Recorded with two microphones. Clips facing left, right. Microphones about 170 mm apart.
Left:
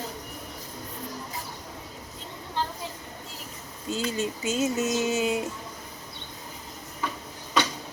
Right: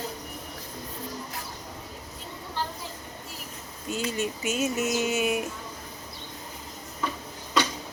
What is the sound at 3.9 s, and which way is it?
Speech, 15° right (ahead or behind).